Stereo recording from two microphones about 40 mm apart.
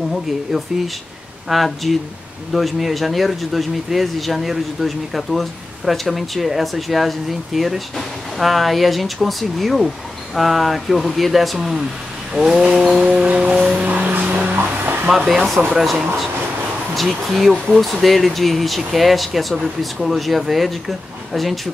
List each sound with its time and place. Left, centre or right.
1.5 s speech: centre
12.4 s vehicle: centre
13.2 s music: right
13.7 s music: right
14.5 s a sound: right
15.0 s vehicle: centre
16.9 s speech: centre